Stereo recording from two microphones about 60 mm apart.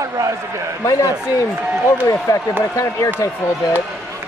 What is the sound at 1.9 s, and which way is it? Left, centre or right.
Speech, left.